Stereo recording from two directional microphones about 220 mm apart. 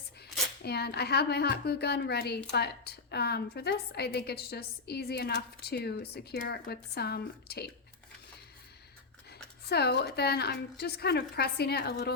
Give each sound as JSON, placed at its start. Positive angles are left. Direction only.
{"t": 0.6, "sound": "a woman's voice", "side_deg": 45}
{"t": 9.6, "sound": "a woman's voice", "side_deg": 45}